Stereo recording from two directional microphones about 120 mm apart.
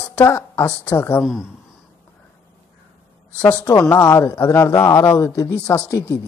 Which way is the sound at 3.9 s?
20° left (ahead or behind).